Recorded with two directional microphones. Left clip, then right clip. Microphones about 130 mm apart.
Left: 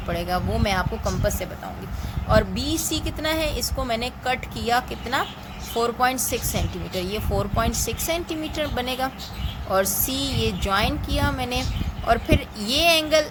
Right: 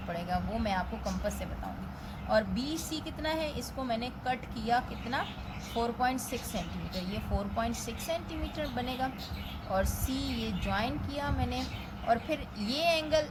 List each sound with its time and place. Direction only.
0.1 s speech: 70° left (ahead or behind)
2.3 s a woman's voice: 60° left (ahead or behind)